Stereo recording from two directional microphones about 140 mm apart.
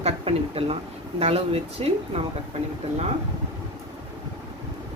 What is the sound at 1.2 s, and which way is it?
Speech, 45° right (ahead or behind).